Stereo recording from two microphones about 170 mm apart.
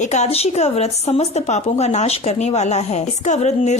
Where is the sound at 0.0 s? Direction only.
40° left (ahead or behind).